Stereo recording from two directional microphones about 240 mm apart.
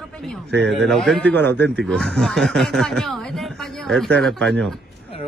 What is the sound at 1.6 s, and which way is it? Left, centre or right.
Speech, right.